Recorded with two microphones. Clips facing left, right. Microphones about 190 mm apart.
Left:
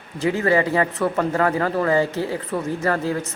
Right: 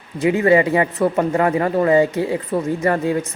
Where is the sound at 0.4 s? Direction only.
15° right (ahead or behind).